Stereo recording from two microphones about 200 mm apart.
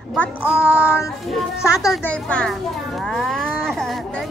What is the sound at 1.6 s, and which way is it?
Speech, centre (ahead or behind).